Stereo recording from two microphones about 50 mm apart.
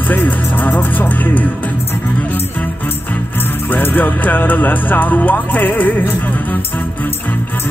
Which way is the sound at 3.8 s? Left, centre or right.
Left.